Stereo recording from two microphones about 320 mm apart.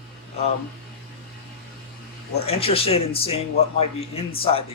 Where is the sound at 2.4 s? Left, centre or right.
Centre.